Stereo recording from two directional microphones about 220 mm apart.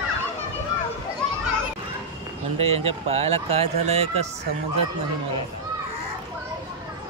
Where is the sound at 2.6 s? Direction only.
30° right (ahead or behind).